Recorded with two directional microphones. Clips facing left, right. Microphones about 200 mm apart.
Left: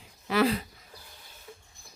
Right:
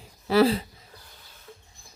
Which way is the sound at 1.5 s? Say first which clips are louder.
Right 1 dB; 10° left (ahead or behind).